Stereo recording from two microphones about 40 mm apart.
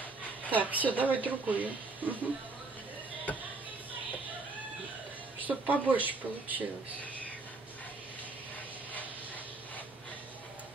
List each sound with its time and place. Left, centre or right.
0.5 s a woman's voice: right
5.4 s speech: right